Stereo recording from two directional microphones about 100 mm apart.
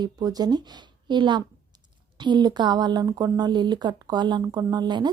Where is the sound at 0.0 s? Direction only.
40° right (ahead or behind).